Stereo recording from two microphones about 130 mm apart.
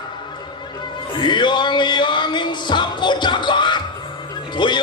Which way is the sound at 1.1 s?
35° left (ahead or behind).